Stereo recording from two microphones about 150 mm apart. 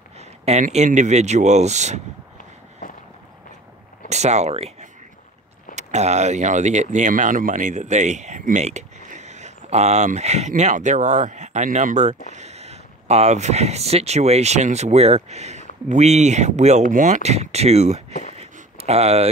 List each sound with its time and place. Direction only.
0.2 s speech: 50° right (ahead or behind)
4.1 s speech: 50° right (ahead or behind)
18.3 s a sound: 45° right (ahead or behind)